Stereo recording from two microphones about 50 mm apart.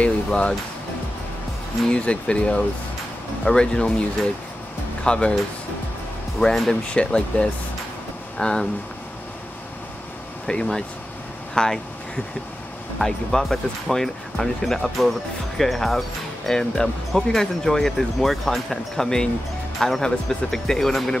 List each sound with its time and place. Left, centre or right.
0.0 s music: left
1.9 s speech: left
6.4 s speech: centre
6.9 s speech: left
10.4 s speech: centre
13.0 s speech: centre